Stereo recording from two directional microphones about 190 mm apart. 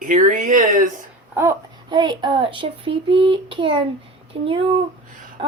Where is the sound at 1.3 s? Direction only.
15° right (ahead or behind).